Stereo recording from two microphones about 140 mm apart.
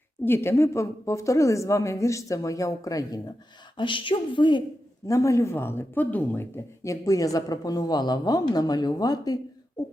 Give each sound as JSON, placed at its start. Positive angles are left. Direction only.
{"t": 0.3, "sound": "speech", "side_deg": 20}
{"t": 3.8, "sound": "a woman's voice", "side_deg": 35}
{"t": 5.0, "sound": "speech", "side_deg": 20}